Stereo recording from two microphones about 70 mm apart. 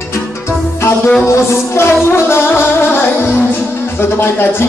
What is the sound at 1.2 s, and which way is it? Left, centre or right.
Music, left.